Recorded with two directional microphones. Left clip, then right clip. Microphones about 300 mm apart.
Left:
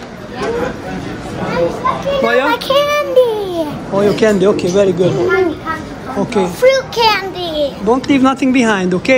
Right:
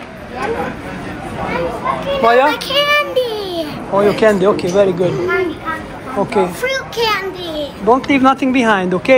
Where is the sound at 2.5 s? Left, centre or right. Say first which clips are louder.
Left 1 dB; centre.